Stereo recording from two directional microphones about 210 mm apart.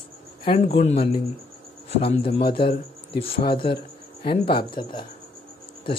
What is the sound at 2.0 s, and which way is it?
Speech, 30° left (ahead or behind).